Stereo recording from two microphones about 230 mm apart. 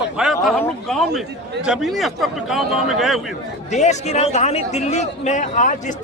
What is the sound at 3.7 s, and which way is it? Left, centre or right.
A man's voice, left.